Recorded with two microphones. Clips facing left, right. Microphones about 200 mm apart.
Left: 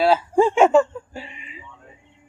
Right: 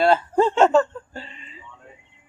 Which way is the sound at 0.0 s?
5° left (ahead or behind).